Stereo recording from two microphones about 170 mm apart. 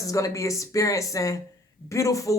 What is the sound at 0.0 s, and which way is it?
Speech, 20° left (ahead or behind).